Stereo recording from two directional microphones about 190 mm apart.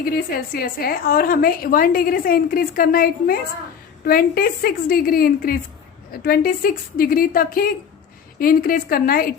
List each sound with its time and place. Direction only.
0.0 s a woman's voice: 50° left (ahead or behind)